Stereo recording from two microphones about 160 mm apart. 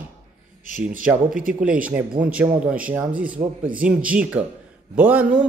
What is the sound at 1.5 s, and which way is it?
Speech, 5° right (ahead or behind).